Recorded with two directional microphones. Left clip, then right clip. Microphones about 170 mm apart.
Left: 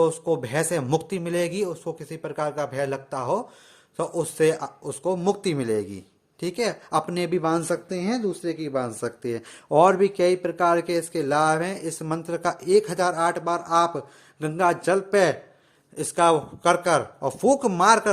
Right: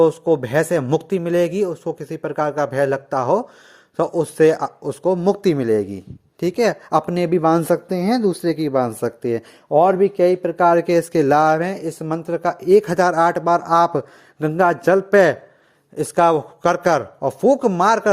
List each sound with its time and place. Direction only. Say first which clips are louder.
0.0 s a man's voice: right 7 dB; 30° right (ahead or behind)
9.6 s speech: right 3 dB; 10° right (ahead or behind)
10.6 s a man's voice: right 8 dB; 35° right (ahead or behind)
17.2 s speech: right 5 dB; 20° right (ahead or behind)